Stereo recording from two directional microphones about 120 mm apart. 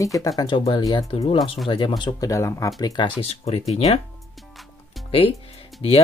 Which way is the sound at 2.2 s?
25° left (ahead or behind).